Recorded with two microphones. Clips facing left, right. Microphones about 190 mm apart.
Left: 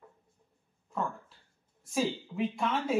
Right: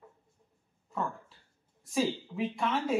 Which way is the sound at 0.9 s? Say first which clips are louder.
Even; centre (ahead or behind).